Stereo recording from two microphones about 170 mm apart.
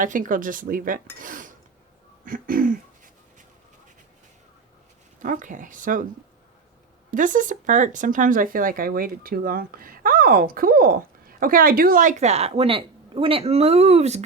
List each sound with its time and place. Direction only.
0.0 s speech: 50° right (ahead or behind)
2.2 s a sound: 55° right (ahead or behind)
5.2 s speech: 50° right (ahead or behind)
7.1 s speech: 50° right (ahead or behind)